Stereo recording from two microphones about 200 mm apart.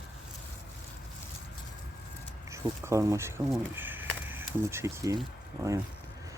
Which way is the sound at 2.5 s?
15° right (ahead or behind).